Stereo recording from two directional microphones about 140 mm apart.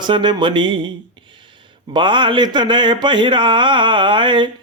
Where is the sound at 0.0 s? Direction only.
35° right (ahead or behind).